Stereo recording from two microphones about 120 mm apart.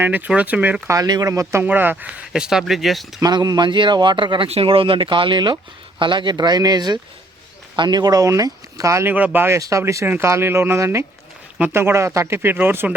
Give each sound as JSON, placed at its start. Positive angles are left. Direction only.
{"t": 0.0, "sound": "speech", "side_deg": -15}
{"t": 0.9, "sound": "speech", "side_deg": -30}
{"t": 3.2, "sound": "speech", "side_deg": -35}
{"t": 9.1, "sound": "speech", "side_deg": -15}